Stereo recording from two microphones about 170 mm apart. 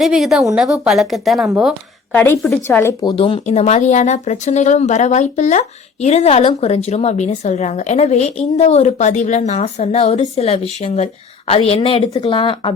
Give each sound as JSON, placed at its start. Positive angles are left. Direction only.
{"t": 0.0, "sound": "speech", "side_deg": 0}
{"t": 2.1, "sound": "speech", "side_deg": 10}
{"t": 3.0, "sound": "a woman's voice", "side_deg": 25}